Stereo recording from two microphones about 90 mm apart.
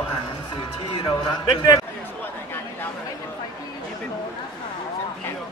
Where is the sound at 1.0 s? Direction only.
55° left (ahead or behind).